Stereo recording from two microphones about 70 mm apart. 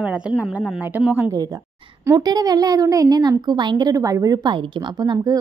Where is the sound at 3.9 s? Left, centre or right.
Right.